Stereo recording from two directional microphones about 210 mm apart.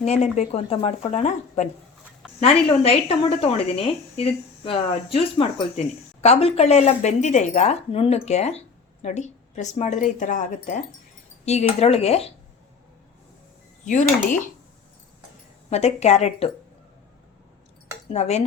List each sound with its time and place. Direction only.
0.0 s speech: 30° left (ahead or behind)
15.7 s speech: 30° left (ahead or behind)
18.1 s speech: 30° left (ahead or behind)